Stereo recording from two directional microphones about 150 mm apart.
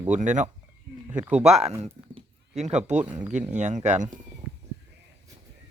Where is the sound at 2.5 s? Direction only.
50° right (ahead or behind).